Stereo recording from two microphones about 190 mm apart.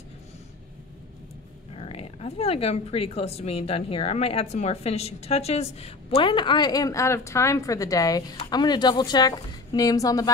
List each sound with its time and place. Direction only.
1.8 s a woman's voice: 30° left (ahead or behind)